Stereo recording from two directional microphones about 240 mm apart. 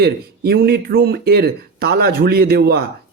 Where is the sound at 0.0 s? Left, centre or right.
Right.